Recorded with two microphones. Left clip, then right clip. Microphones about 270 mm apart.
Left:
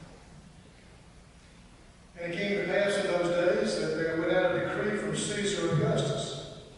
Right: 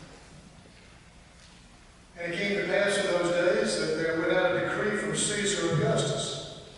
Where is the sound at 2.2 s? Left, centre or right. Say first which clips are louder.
Right 2 dB; centre.